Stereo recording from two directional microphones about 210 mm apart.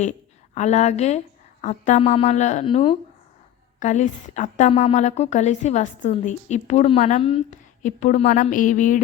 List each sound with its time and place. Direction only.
0.0 s a woman's voice: 35° left (ahead or behind)
3.8 s a woman's voice: 35° left (ahead or behind)